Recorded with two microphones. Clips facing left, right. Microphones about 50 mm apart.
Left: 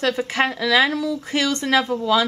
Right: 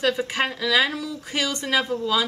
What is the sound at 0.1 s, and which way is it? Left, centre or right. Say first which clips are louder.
A woman's voice: left 3 dB; left.